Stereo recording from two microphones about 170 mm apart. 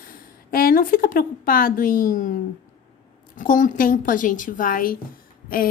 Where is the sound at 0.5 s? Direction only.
60° left (ahead or behind).